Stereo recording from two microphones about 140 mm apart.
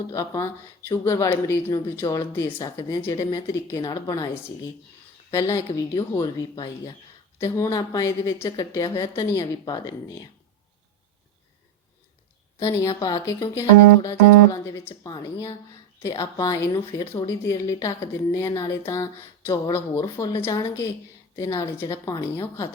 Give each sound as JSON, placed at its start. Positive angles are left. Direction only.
{"t": 0.1, "sound": "speech", "side_deg": 25}
{"t": 12.5, "sound": "a woman's voice", "side_deg": 20}